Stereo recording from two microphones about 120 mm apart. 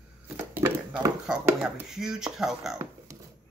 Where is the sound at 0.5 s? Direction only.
15° right (ahead or behind).